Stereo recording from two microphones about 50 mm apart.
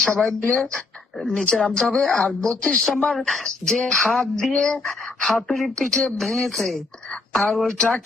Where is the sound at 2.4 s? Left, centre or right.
Left.